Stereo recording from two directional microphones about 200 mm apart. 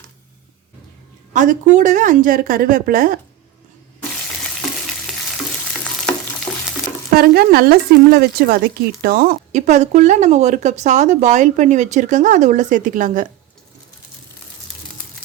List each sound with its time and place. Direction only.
1.3 s a woman's voice: 40° right (ahead or behind)
7.1 s speech: 50° right (ahead or behind)